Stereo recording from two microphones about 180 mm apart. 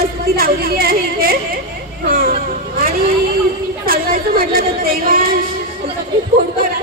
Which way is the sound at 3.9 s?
55° right (ahead or behind).